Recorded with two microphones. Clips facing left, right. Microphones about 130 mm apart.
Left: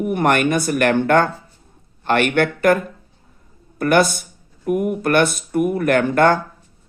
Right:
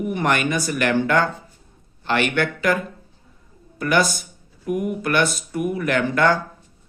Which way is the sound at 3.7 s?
55° left (ahead or behind).